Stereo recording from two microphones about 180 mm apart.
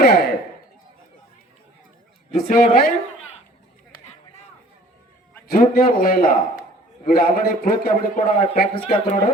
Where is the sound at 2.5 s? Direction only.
50° left (ahead or behind).